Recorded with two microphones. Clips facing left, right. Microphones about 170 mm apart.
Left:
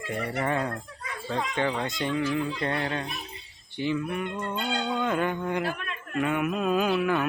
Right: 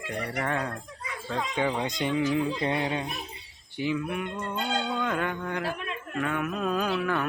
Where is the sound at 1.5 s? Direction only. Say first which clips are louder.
Right 2 dB; 10° right (ahead or behind).